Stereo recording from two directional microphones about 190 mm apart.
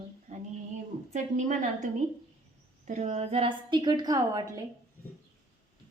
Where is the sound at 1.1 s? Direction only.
40° right (ahead or behind); by 4.6 s 20° right (ahead or behind).